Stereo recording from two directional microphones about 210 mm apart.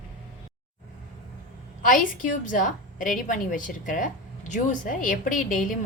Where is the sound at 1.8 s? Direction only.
40° left (ahead or behind).